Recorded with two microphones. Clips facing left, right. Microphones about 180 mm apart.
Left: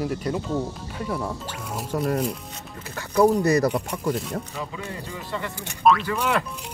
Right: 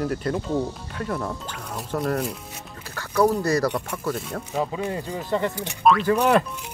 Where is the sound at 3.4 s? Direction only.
20° left (ahead or behind).